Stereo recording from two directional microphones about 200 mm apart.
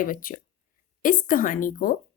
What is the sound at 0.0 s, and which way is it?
A woman's voice, 45° left (ahead or behind).